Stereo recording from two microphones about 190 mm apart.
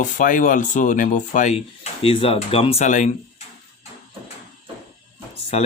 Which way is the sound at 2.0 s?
30° left (ahead or behind).